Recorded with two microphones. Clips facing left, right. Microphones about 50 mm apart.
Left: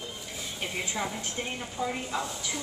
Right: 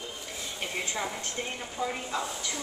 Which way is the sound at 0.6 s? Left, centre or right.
Centre.